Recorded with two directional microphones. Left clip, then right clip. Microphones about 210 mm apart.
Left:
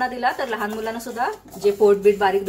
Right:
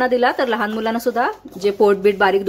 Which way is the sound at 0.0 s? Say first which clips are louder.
Right 6 dB; 45° right (ahead or behind).